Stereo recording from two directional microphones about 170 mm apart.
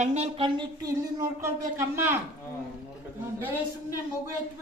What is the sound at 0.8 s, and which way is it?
A woman's voice, 20° right (ahead or behind).